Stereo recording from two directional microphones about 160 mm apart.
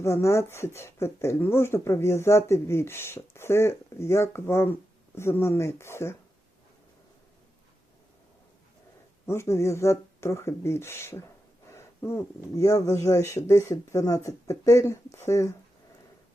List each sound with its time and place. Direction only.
0.0 s speech: 15° left (ahead or behind)
9.2 s speech: 15° left (ahead or behind)